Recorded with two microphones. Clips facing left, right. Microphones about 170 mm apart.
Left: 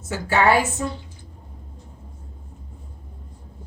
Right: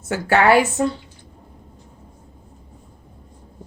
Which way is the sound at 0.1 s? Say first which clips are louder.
Right 3 dB; 65° right (ahead or behind).